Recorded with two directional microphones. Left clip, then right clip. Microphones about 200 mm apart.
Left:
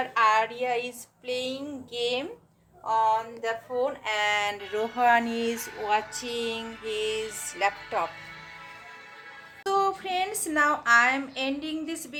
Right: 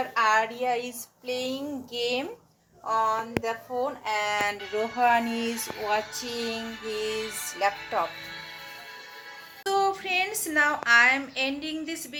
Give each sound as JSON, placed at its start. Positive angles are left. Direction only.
{"t": 0.1, "sound": "speech", "side_deg": -5}
{"t": 6.8, "sound": "music", "side_deg": -35}
{"t": 7.2, "sound": "speech", "side_deg": -20}
{"t": 9.6, "sound": "speech", "side_deg": 0}